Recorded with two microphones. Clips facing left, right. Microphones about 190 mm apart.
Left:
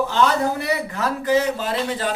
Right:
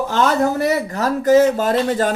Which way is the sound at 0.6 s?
45° right (ahead or behind).